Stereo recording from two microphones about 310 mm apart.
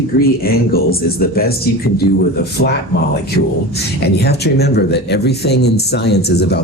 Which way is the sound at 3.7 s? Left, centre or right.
Left.